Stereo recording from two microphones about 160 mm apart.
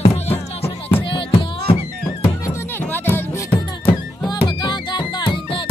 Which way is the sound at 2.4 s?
15° left (ahead or behind).